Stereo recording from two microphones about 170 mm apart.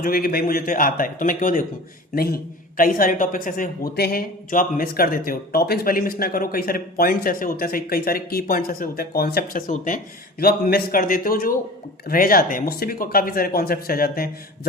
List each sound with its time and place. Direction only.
0.0 s a man's voice: 60° left (ahead or behind)
10.4 s a man's voice: 65° left (ahead or behind)